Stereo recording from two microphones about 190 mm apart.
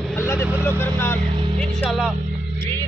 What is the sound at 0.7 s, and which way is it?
Vehicle, 10° left (ahead or behind).